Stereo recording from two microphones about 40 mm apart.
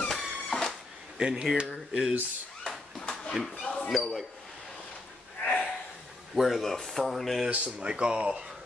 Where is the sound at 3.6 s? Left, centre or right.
Left.